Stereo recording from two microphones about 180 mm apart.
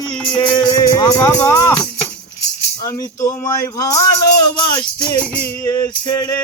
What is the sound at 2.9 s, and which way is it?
Speech, 20° left (ahead or behind).